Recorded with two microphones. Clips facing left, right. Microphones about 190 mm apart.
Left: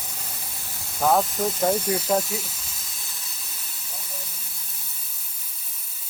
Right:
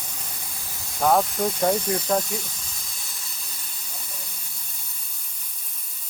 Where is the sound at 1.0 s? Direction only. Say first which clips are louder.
Right 1 dB; centre (ahead or behind).